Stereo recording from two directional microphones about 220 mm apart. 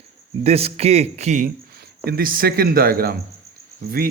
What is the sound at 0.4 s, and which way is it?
Speech, 25° right (ahead or behind).